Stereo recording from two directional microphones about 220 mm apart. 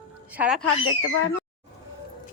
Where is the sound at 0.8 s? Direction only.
70° left (ahead or behind).